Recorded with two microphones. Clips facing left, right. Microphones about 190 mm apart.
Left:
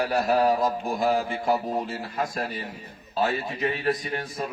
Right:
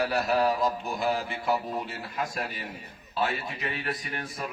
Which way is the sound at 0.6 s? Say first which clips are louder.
Left 3 dB; 45° left (ahead or behind).